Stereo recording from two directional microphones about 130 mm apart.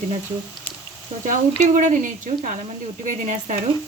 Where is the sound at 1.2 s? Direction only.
75° right (ahead or behind).